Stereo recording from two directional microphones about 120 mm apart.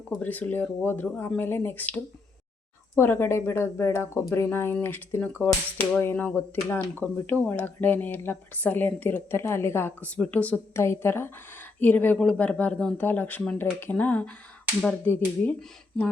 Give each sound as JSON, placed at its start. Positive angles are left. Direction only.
{"t": 0.2, "sound": "speech", "side_deg": 15}